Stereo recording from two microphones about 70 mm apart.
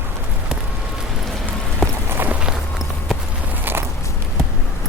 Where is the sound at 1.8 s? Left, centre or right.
Centre.